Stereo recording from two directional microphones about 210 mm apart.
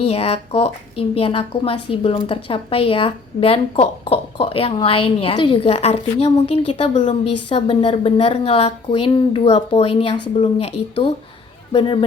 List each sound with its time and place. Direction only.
0.0 s a woman's voice: 30° left (ahead or behind)
11.7 s a woman's voice: 25° left (ahead or behind)